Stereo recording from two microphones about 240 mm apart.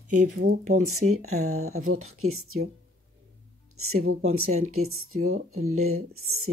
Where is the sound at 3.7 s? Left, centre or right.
Right.